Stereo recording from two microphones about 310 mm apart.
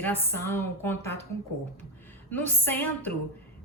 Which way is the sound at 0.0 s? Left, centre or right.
Centre.